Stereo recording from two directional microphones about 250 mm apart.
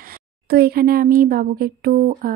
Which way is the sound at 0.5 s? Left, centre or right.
Right.